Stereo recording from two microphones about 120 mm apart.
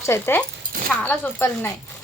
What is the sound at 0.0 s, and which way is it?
Speech, 20° left (ahead or behind).